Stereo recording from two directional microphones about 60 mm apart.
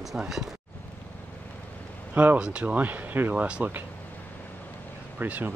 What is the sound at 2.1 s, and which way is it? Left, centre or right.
Speech, right.